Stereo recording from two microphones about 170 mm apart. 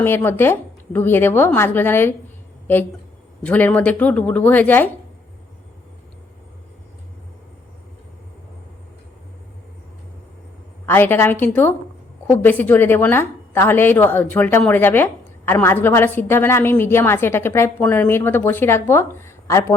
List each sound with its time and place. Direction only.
0.0 s a woman's voice: 10° left (ahead or behind)
3.4 s a woman's voice: 10° left (ahead or behind)
10.8 s a woman's voice: 10° left (ahead or behind)